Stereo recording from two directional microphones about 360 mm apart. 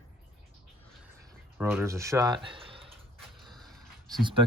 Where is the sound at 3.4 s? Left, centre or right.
Centre.